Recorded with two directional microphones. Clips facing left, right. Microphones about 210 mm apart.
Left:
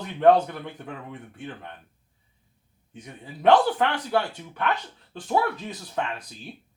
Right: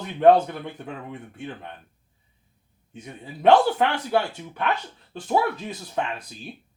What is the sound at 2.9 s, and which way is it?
A man's voice, 25° right (ahead or behind).